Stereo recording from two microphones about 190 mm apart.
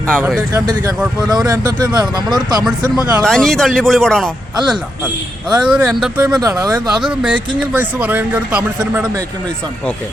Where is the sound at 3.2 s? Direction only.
5° left (ahead or behind).